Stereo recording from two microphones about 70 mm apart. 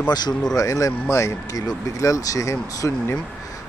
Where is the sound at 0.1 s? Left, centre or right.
Left.